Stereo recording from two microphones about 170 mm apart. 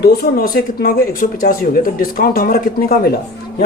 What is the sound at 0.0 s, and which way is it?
Speech, 70° left (ahead or behind).